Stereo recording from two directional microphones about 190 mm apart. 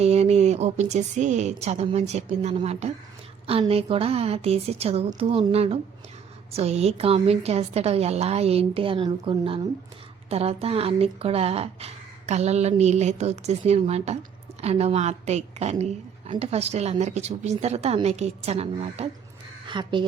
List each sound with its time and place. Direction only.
0.0 s a woman's voice: 35° right (ahead or behind)